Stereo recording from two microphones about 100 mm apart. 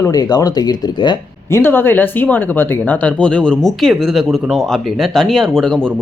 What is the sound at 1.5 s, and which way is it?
Speech, 20° left (ahead or behind).